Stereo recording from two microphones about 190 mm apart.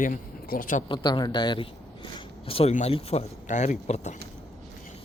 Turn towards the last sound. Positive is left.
turn(degrees=40)  # may be behind; listen again after turning